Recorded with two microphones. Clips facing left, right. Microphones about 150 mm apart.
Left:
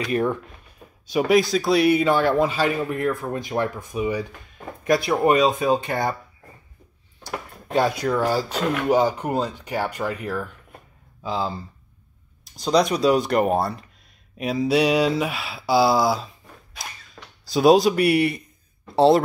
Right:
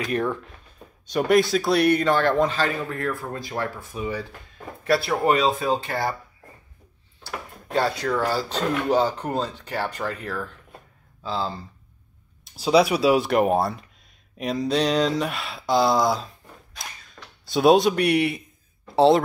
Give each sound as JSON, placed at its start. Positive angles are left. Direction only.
{"t": 1.0, "sound": "a man's voice", "side_deg": 5}
{"t": 7.2, "sound": "a man's voice", "side_deg": 15}
{"t": 12.4, "sound": "speech", "side_deg": -5}